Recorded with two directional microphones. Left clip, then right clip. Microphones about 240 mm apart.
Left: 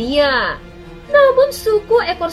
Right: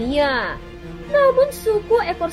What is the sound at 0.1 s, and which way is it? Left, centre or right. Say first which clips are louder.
Speech: left 5 dB; right.